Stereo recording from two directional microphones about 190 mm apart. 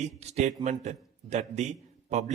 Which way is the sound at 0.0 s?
35° right (ahead or behind).